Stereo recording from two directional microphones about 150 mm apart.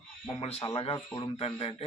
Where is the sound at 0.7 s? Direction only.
40° left (ahead or behind).